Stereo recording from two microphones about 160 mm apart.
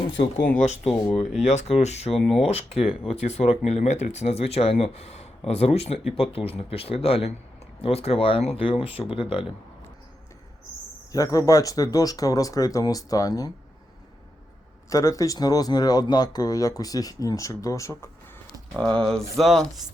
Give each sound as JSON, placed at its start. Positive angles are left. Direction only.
{"t": 0.4, "sound": "speech", "side_deg": 50}
{"t": 11.1, "sound": "speech", "side_deg": 20}
{"t": 14.8, "sound": "speech", "side_deg": 20}
{"t": 18.8, "sound": "speech", "side_deg": 5}